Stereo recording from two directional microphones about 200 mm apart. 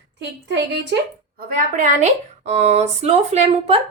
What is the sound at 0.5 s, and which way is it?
Speech, 60° right (ahead or behind).